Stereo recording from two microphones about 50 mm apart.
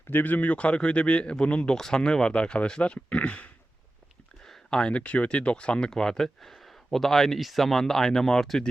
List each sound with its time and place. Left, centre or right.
0.1 s speech: left
4.7 s speech: left